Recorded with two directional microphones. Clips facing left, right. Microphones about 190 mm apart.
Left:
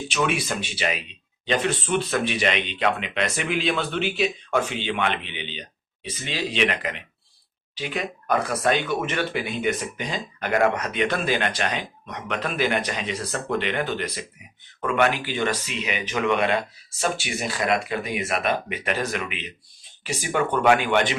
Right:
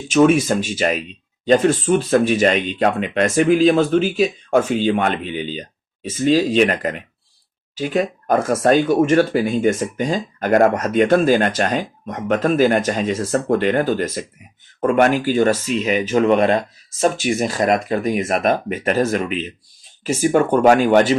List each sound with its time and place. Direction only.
0.1 s speech: 45° right (ahead or behind)